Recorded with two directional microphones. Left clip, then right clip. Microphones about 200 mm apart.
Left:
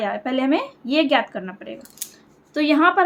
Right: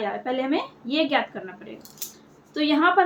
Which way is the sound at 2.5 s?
55° left (ahead or behind).